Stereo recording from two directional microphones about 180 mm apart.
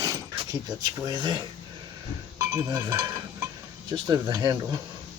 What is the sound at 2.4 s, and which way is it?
Stir, 15° right (ahead or behind).